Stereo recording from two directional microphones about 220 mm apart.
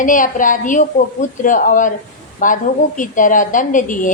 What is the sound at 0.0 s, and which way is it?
A woman's voice, 35° left (ahead or behind).